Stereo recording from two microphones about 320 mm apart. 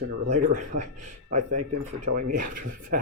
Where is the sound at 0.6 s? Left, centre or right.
Right.